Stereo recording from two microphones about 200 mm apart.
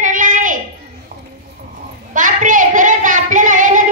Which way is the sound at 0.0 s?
40° right (ahead or behind).